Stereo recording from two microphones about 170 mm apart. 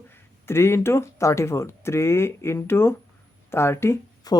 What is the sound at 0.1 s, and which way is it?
Speech, 15° left (ahead or behind).